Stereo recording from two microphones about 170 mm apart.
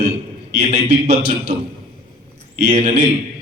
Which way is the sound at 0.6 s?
40° right (ahead or behind).